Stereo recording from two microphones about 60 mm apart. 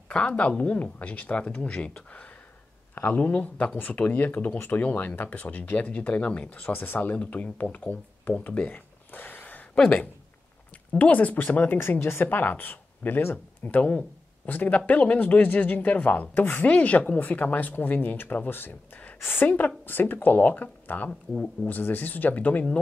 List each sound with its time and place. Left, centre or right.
0.1 s speech: left
2.9 s a sound: left
3.2 s speech: left
11.8 s speech: left